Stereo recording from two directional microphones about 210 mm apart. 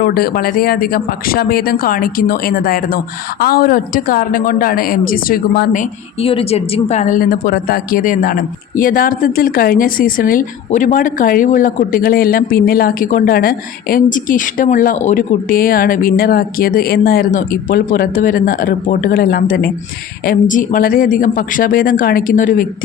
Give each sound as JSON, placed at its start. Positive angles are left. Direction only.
{"t": 0.0, "sound": "a woman's voice", "side_deg": 45}